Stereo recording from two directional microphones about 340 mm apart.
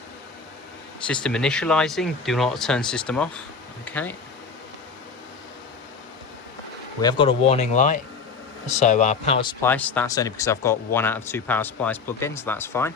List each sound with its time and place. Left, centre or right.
1.0 s speech: centre
7.0 s speech: centre